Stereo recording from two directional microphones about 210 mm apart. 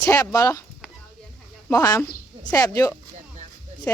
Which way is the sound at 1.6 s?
15° left (ahead or behind).